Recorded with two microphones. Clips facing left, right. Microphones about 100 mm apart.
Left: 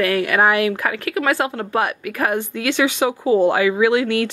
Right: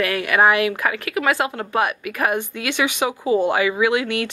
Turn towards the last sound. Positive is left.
turn(degrees=-20)  # may be behind; listen again after turning